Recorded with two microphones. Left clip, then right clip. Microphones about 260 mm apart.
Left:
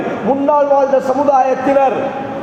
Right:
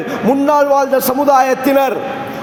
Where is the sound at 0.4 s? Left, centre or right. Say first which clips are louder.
Left 1 dB; right.